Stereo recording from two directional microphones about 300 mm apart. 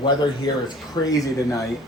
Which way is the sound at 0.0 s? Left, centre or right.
Centre.